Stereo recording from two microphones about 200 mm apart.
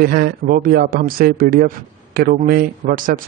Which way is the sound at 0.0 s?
50° right (ahead or behind).